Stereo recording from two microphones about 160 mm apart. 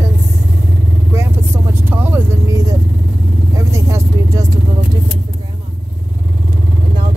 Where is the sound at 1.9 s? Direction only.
10° right (ahead or behind).